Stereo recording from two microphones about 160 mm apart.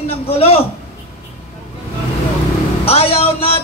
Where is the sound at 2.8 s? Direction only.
35° left (ahead or behind).